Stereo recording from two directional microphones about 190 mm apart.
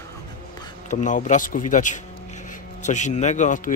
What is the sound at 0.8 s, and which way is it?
Speech, 40° left (ahead or behind).